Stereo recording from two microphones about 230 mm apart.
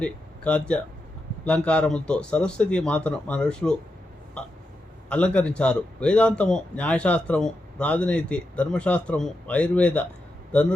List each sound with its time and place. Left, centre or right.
0.0 s a man's voice: centre
5.0 s a man's voice: centre